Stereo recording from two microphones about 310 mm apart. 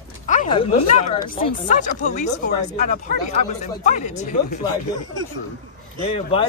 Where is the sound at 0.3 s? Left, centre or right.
Left.